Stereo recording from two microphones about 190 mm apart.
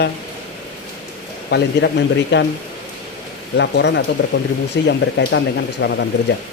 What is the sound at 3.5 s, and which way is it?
Speech, 65° left (ahead or behind).